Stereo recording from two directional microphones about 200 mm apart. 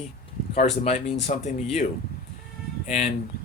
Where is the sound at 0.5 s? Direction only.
35° left (ahead or behind).